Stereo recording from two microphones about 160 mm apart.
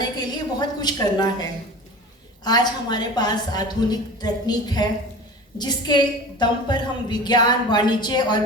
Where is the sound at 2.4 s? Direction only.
25° left (ahead or behind).